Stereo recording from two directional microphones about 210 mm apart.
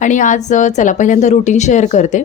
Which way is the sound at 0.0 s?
35° left (ahead or behind).